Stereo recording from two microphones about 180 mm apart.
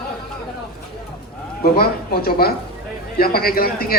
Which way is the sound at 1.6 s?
55° left (ahead or behind).